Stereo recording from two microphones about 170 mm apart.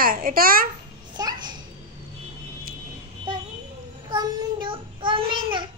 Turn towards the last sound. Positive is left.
turn(degrees=-30)  # may be behind; listen again after turning